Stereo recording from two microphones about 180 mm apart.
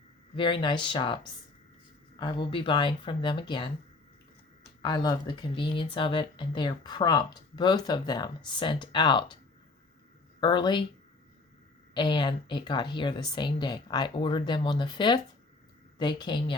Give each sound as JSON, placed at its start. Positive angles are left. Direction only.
{"t": 0.3, "sound": "speech", "side_deg": 25}
{"t": 4.8, "sound": "speech", "side_deg": 25}
{"t": 10.4, "sound": "speech", "side_deg": 25}
{"t": 11.9, "sound": "speech", "side_deg": 25}